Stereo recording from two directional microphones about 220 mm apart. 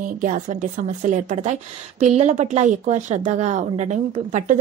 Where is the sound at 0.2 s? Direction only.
35° right (ahead or behind).